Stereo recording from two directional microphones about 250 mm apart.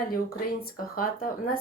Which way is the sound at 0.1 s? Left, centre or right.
Left.